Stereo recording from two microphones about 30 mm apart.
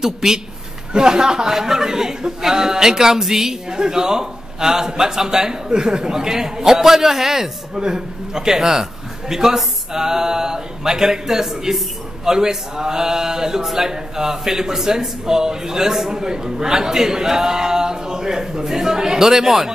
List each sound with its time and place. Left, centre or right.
0.0 s a man's voice: centre